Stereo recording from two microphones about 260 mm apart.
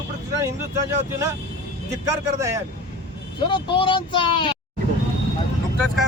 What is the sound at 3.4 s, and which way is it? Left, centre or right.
Speech, centre.